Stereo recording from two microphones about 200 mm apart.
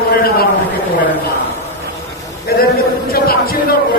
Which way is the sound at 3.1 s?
50° left (ahead or behind).